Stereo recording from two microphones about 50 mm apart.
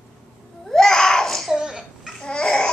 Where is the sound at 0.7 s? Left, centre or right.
Centre.